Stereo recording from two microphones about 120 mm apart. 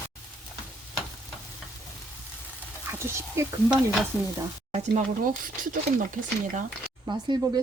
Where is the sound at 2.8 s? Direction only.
20° right (ahead or behind).